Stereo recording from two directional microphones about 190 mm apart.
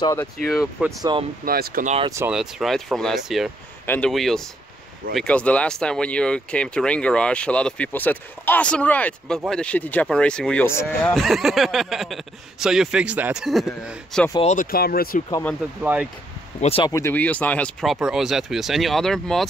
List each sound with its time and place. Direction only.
0.0 s speech: 15° left (ahead or behind)
0.8 s speech: 5° right (ahead or behind)
1.4 s speech: 50° right (ahead or behind)
2.0 s speech: 15° right (ahead or behind)
2.3 s speech: centre (ahead or behind)
3.8 s speech: 10° left (ahead or behind)
14.4 s speech: 40° left (ahead or behind)
15.8 s speech: 10° right (ahead or behind)
16.6 s speech: 30° left (ahead or behind)
16.9 s speech: 10° left (ahead or behind)